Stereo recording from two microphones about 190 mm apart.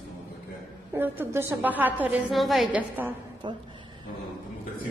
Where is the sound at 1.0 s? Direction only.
10° right (ahead or behind).